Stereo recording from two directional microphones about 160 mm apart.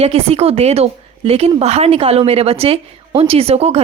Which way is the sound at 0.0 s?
40° right (ahead or behind).